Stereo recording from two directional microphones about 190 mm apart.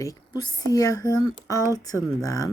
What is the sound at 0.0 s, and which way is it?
Speech, 20° left (ahead or behind).